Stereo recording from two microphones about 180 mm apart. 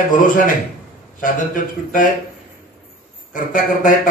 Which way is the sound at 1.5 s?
50° left (ahead or behind).